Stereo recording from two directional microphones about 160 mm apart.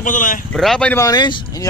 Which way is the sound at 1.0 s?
25° left (ahead or behind).